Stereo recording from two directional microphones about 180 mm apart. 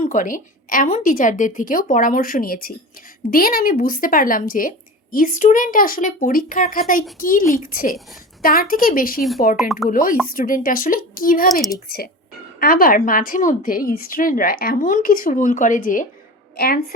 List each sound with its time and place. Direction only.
0.0 s a woman's voice: 45° left (ahead or behind)
12.5 s a woman's voice: 55° left (ahead or behind)